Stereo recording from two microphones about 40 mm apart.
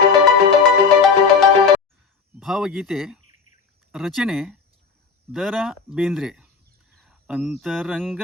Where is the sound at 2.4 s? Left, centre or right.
Centre.